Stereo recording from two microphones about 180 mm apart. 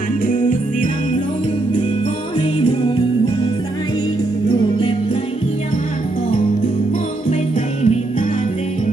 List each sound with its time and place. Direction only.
0.3 s music: 50° left (ahead or behind)
7.8 s jingle bell: 40° left (ahead or behind)